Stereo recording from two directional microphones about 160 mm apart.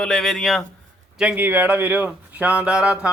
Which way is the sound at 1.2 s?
10° right (ahead or behind).